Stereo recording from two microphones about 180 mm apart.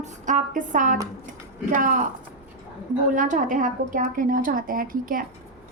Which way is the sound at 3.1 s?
45° right (ahead or behind).